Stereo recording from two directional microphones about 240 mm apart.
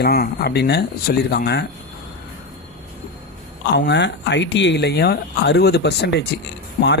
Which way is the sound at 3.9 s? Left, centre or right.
Left.